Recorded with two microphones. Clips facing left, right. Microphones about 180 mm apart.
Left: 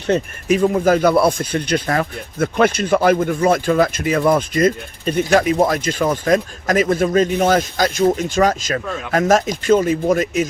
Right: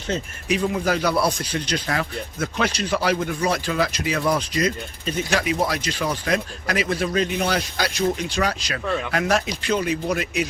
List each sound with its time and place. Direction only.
0.1 s speech: 50° left (ahead or behind)